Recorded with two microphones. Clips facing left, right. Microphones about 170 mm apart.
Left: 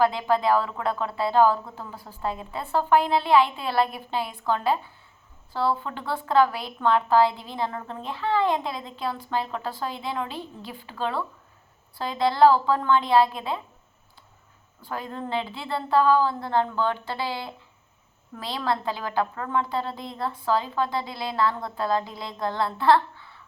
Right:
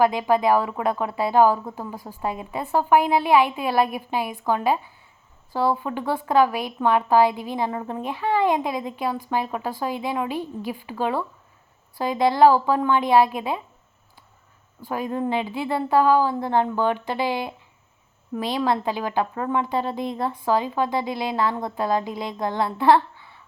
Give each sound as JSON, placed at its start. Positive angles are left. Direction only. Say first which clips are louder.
{"t": 0.0, "sound": "a woman's voice", "louder": "right 3 dB", "side_deg": -15}
{"t": 14.8, "sound": "a woman's voice", "louder": "right 7 dB", "side_deg": -15}